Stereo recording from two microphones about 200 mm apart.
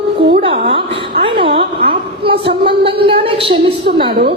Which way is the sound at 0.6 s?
25° right (ahead or behind).